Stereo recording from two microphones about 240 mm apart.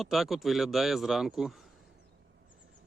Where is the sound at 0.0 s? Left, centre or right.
Centre.